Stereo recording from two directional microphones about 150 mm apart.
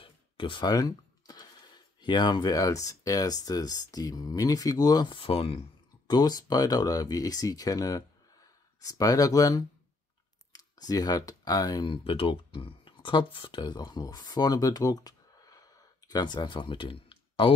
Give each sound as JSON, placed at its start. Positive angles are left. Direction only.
{"t": 0.0, "sound": "speech", "side_deg": 35}
{"t": 6.0, "sound": "speech", "side_deg": 25}